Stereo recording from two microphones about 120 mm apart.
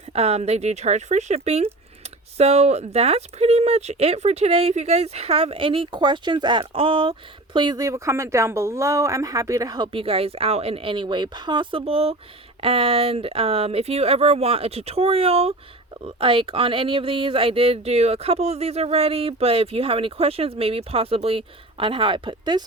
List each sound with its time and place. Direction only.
0.1 s speech: 60° right (ahead or behind); by 9.9 s 30° right (ahead or behind)
9.9 s speech: 50° right (ahead or behind)